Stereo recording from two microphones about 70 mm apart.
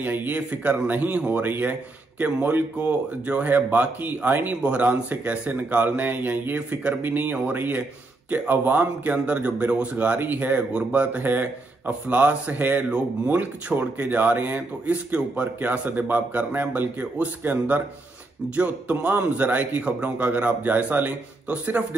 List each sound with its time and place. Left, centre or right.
0.0 s speech: right